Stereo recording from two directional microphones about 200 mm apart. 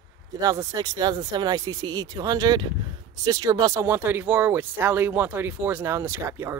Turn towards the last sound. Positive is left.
turn(degrees=-15)  # may be behind; listen again after turning